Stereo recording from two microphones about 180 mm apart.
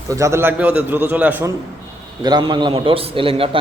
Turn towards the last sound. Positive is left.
turn(degrees=-30)  # may be behind; listen again after turning